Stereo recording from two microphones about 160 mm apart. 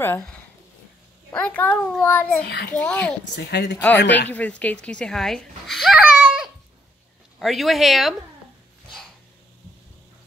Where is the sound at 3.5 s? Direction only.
90° left.